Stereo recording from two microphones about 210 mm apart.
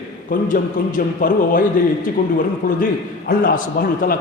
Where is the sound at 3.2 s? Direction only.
40° left (ahead or behind).